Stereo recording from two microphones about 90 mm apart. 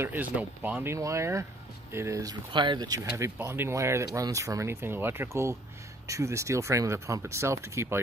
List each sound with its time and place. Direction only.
0.0 s speech: 20° right (ahead or behind)
0.8 s speech: 35° right (ahead or behind)
2.5 s speech: 60° right (ahead or behind)
2.9 s speech: 45° right (ahead or behind)
3.4 s speech: 30° right (ahead or behind)